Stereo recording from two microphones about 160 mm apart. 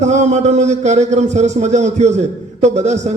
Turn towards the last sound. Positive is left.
turn(degrees=-45)  # may be behind; listen again after turning